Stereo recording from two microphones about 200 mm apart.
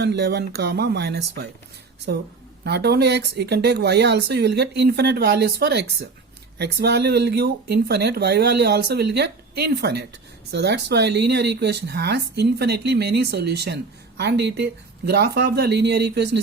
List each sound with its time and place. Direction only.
0.0 s speech: 55° right (ahead or behind)
2.6 s speech: 55° right (ahead or behind)